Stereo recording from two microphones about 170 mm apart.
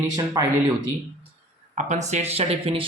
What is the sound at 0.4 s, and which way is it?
Speech, 20° right (ahead or behind).